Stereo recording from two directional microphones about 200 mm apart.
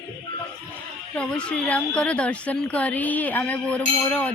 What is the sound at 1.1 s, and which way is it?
A woman's voice, 5° left (ahead or behind).